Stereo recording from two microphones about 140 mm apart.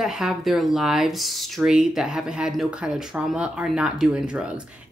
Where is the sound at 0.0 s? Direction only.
Centre (ahead or behind).